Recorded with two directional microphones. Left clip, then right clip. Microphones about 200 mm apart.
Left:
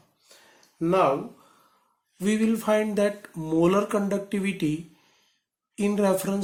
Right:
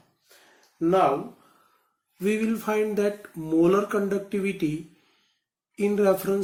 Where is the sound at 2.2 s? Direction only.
50° left (ahead or behind).